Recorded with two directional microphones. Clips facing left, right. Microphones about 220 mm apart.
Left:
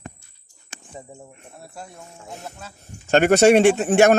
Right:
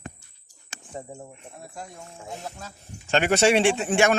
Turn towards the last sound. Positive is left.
turn(degrees=40)  # may be behind; listen again after turning